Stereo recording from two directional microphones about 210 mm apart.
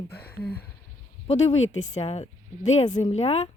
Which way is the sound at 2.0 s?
30° left (ahead or behind).